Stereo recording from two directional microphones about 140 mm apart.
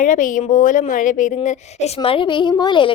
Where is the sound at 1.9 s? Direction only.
40° left (ahead or behind).